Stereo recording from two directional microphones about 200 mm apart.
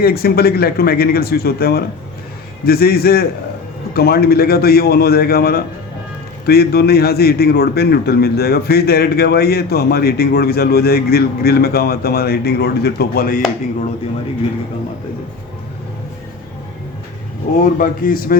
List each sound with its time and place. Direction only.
0.0 s a man's voice: 50° left (ahead or behind)
17.7 s a man's voice: 45° left (ahead or behind)